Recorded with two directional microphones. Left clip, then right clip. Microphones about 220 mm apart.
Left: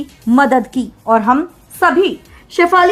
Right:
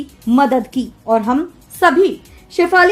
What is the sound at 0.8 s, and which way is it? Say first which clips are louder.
A woman's voice: left 2 dB; 15° left (ahead or behind).